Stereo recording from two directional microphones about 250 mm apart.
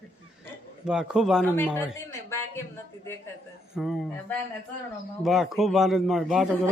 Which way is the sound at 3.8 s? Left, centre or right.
Centre.